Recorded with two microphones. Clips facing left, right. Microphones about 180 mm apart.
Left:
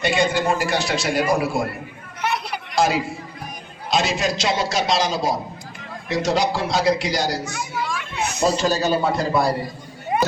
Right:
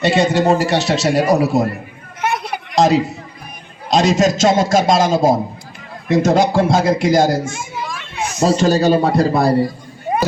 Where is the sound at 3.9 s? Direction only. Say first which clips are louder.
Right 8 dB; 40° right (ahead or behind).